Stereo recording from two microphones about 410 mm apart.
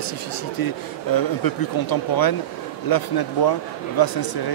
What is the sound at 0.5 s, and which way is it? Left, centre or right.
Speech, left.